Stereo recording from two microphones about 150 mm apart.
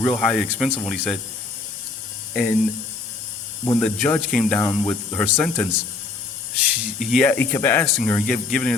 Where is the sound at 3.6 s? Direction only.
10° left (ahead or behind).